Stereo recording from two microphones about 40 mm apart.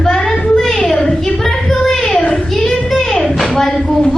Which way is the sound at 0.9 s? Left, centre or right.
Centre.